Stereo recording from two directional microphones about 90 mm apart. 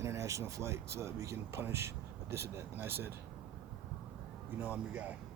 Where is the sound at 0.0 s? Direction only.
35° right (ahead or behind).